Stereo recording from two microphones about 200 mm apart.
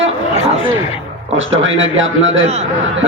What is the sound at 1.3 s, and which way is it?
A man's voice, 75° right (ahead or behind).